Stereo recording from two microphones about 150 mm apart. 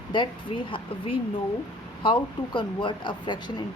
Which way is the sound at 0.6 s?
35° left (ahead or behind).